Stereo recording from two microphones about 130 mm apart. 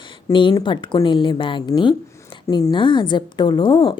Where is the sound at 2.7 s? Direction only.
40° left (ahead or behind).